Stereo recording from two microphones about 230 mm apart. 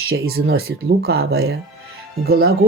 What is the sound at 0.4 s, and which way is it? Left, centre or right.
Speech, right.